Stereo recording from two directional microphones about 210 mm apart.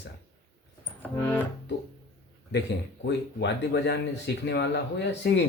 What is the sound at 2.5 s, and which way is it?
Speech, 55° left (ahead or behind).